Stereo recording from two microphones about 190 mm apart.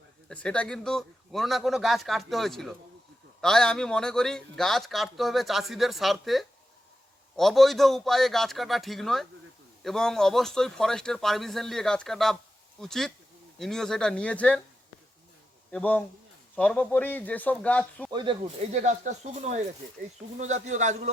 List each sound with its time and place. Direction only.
0.3 s a man's voice: 5° left (ahead or behind)
15.7 s a man's voice: 5° left (ahead or behind)
18.1 s speech: 25° right (ahead or behind)
18.7 s speech: 40° right (ahead or behind)